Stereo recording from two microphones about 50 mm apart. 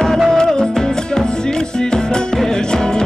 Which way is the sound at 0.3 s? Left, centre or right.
Centre.